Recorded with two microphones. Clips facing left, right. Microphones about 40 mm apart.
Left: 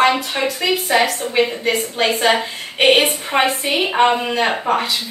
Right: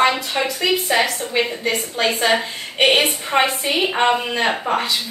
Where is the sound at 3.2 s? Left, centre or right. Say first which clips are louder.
Left 1 dB; centre.